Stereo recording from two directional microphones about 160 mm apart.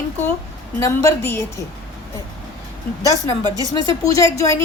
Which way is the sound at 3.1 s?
25° right (ahead or behind).